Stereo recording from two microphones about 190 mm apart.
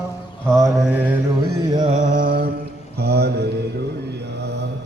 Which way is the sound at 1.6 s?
20° right (ahead or behind).